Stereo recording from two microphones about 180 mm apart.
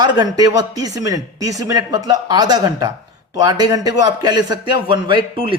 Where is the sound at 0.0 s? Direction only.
20° right (ahead or behind).